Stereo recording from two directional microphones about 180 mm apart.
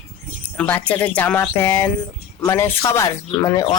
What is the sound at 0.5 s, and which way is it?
A woman's voice, 5° left (ahead or behind).